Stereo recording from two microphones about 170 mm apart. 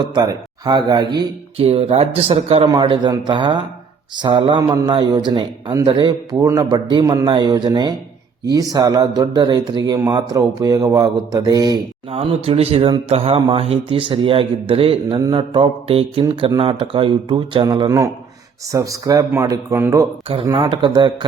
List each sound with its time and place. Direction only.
0.0 s a man's voice: 25° right (ahead or behind)
12.1 s a man's voice: 35° right (ahead or behind); by 20.1 s 15° right (ahead or behind)
20.2 s a man's voice: 30° right (ahead or behind)